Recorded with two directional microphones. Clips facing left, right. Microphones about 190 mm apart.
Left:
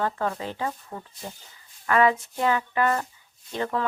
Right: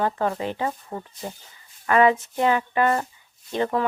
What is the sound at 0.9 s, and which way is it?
Speech, 30° right (ahead or behind).